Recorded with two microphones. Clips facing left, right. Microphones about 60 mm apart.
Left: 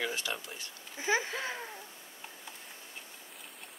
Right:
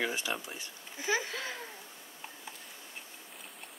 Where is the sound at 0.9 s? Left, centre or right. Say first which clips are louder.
Left 2 dB; left.